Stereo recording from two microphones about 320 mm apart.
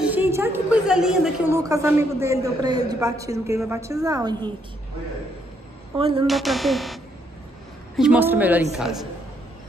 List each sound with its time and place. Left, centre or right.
0.0 s a woman's voice: centre
5.9 s a woman's voice: centre
6.2 s speech: centre